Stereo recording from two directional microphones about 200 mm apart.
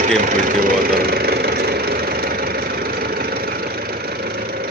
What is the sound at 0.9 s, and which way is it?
Vehicle, 50° right (ahead or behind).